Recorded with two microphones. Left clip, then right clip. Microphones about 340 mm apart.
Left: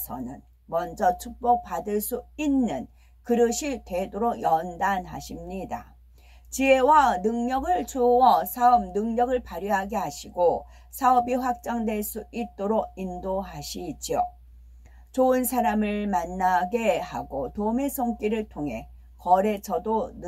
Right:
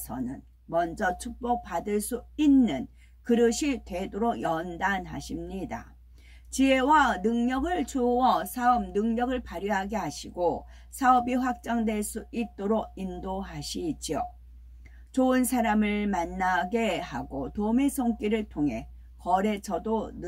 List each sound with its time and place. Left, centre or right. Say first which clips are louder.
0.7 s speech: left 3 dB; centre